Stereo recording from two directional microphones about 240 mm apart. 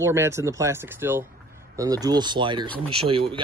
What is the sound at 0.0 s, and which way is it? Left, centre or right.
Speech, centre.